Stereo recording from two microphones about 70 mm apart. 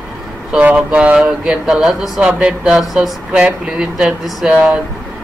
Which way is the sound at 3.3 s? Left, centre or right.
Centre.